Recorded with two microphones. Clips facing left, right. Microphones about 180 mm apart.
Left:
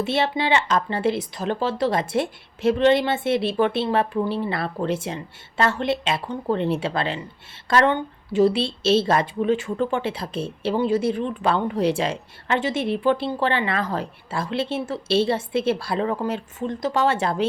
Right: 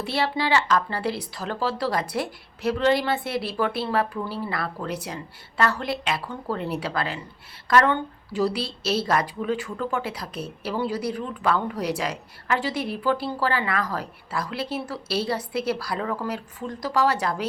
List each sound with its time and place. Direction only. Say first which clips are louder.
0.0 s a woman's voice: left 3 dB; 20° left (ahead or behind)